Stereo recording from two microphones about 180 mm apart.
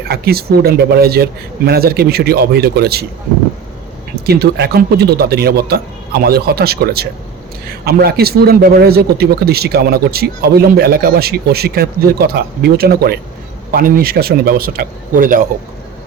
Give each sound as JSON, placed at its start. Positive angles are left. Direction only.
{"t": 0.1, "sound": "a man's voice", "side_deg": -60}
{"t": 4.1, "sound": "a man's voice", "side_deg": -65}